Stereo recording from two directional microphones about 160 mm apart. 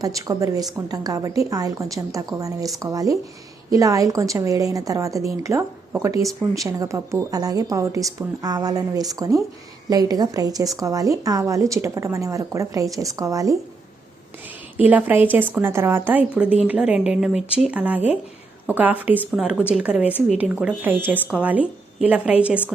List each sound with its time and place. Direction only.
0.0 s a woman's voice: 20° right (ahead or behind)
14.8 s a woman's voice: 10° right (ahead or behind)